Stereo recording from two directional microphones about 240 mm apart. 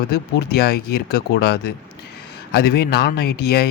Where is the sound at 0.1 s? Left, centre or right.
Left.